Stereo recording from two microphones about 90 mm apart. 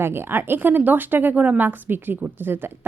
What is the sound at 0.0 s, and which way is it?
Speech, 25° right (ahead or behind).